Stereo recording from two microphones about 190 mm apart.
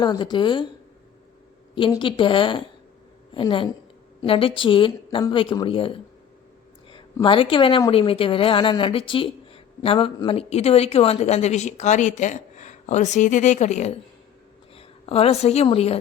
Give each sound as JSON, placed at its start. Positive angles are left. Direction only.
{"t": 0.0, "sound": "speech", "side_deg": 25}
{"t": 1.7, "sound": "a woman's voice", "side_deg": 25}